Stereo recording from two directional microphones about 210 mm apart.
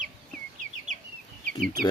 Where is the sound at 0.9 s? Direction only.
35° right (ahead or behind).